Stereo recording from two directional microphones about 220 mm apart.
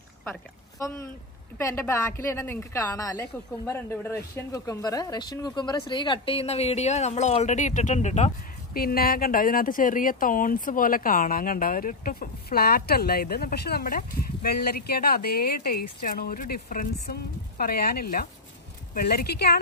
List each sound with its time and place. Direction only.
0.2 s a woman's voice: 10° left (ahead or behind); by 8.3 s 30° left (ahead or behind)
8.7 s speech: 40° left (ahead or behind)